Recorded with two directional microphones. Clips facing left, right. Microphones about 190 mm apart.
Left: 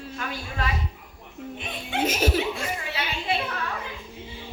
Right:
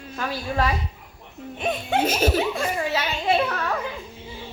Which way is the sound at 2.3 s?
45° right (ahead or behind).